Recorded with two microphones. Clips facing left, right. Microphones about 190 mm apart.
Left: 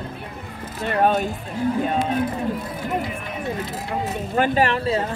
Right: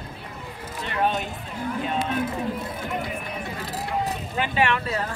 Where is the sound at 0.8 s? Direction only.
45° left (ahead or behind).